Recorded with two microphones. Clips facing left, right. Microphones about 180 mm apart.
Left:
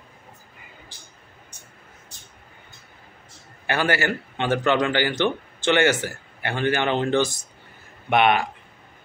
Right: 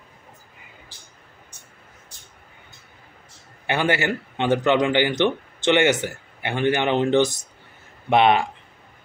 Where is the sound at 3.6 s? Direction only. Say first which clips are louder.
Right 1 dB; 20° right (ahead or behind).